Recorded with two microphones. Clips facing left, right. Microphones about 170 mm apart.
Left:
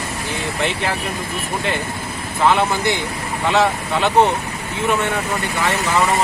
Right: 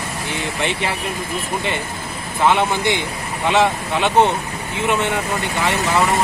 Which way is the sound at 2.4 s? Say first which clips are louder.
Even; 20° right (ahead or behind).